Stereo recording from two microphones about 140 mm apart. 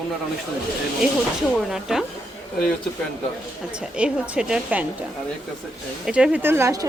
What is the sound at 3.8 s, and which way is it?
Speech, 5° right (ahead or behind).